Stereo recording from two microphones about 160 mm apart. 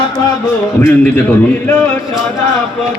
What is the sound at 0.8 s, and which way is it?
A man's voice, 15° left (ahead or behind).